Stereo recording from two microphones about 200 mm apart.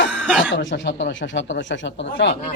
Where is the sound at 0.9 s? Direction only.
60° left (ahead or behind).